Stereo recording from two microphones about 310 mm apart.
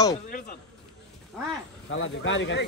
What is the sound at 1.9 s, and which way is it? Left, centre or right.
Speech, left.